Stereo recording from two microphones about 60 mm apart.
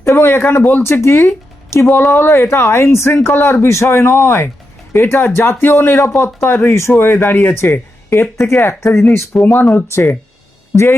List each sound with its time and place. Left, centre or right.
0.0 s a woman's voice: left
9.4 s speech: left